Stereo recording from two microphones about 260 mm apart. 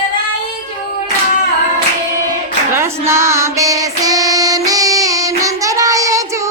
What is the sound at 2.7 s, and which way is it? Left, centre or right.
Female singing, centre.